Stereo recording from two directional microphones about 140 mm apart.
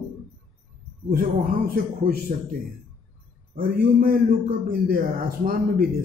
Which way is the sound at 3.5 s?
90° right.